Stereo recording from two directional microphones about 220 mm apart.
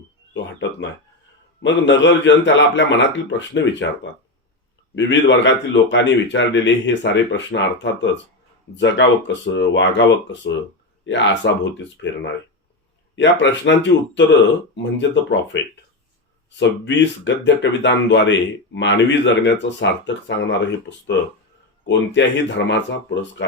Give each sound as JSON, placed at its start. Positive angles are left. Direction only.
{"t": 1.6, "sound": "speech", "side_deg": 55}
{"t": 4.9, "sound": "speech", "side_deg": 55}
{"t": 21.8, "sound": "speech", "side_deg": 55}